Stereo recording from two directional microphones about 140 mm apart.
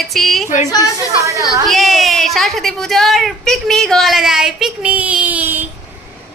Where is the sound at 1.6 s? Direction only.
Centre (ahead or behind).